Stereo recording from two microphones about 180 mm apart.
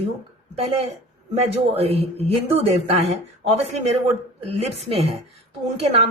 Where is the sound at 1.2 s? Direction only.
35° right (ahead or behind).